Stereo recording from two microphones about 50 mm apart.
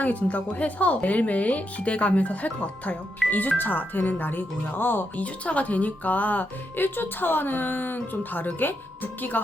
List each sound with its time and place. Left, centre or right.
0.0 s speech: left
5.2 s speech: left